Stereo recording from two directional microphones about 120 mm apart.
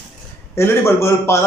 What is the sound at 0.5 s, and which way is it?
Speech, 20° left (ahead or behind).